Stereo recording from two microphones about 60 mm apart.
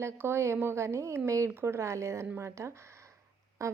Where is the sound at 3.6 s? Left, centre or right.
Right.